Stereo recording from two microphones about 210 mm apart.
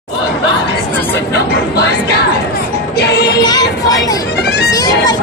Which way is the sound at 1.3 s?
50° left (ahead or behind).